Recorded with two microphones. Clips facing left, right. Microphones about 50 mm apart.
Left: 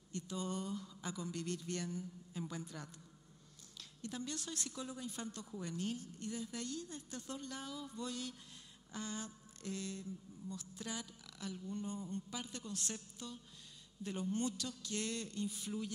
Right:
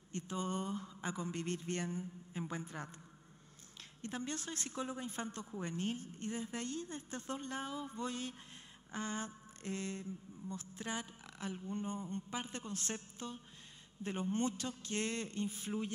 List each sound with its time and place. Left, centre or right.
0.1 s mantra: right
4.0 s mantra: right